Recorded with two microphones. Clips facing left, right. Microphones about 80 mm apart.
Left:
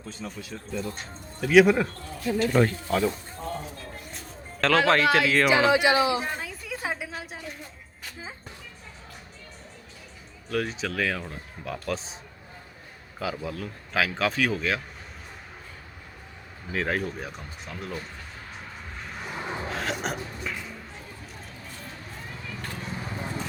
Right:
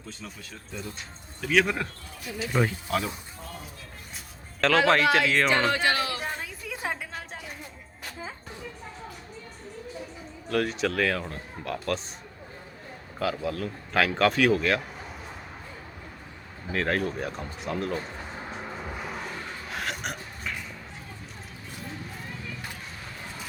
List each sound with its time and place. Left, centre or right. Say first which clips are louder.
0.1 s speech: left 4 dB; centre
1.4 s speech: left 7 dB; centre
2.4 s speech: left 3 dB; centre
4.6 s speech: even; centre
6.2 s a sound: left 1 dB; centre
10.5 s speech: right 3 dB; centre
13.1 s speech: right 3 dB; centre
16.7 s speech: right 1 dB; centre
18.9 s a sound: right 4 dB; centre
19.3 s gasp: left 4 dB; left
19.7 s a sound: left 1 dB; centre